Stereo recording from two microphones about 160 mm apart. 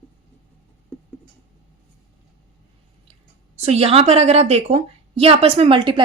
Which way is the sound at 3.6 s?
40° right (ahead or behind).